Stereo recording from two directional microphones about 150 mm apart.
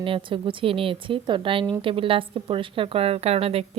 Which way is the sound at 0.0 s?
35° right (ahead or behind).